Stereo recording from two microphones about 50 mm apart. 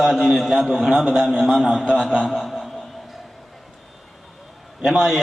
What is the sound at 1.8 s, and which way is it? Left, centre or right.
Speech, left.